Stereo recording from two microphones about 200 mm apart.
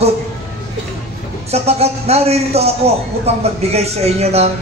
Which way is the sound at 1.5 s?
30° right (ahead or behind).